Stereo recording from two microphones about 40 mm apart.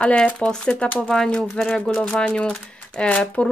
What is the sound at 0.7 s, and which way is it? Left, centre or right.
Speech, left.